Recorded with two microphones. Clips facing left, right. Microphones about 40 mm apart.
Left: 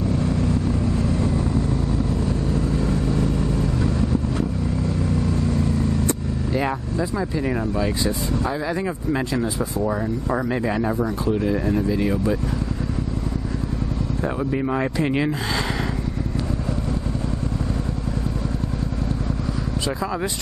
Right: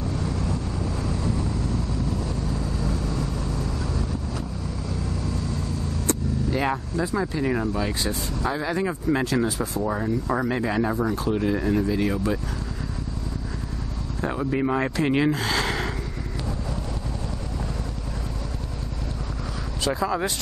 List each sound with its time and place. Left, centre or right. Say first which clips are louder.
2.5 s vehicle: left 6 dB; left
6.5 s speech: left 2 dB; centre
14.2 s speech: right 1 dB; centre
19.9 s speech: right 3 dB; centre